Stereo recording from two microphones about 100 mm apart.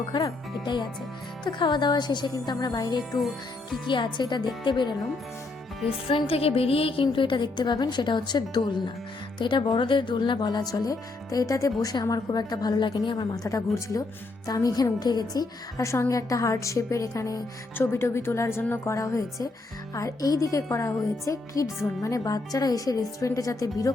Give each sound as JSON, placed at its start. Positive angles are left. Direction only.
{"t": 0.1, "sound": "a woman's voice", "side_deg": 45}
{"t": 3.0, "sound": "speech", "side_deg": 0}
{"t": 3.8, "sound": "a woman's voice", "side_deg": 50}
{"t": 6.1, "sound": "a woman's voice", "side_deg": 70}
{"t": 17.7, "sound": "speech", "side_deg": 25}
{"t": 18.9, "sound": "speech", "side_deg": 35}